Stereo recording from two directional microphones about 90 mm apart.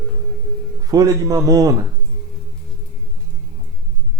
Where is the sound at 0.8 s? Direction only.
40° right (ahead or behind).